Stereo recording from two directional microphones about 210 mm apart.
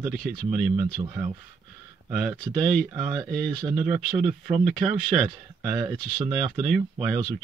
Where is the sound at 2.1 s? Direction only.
5° left (ahead or behind).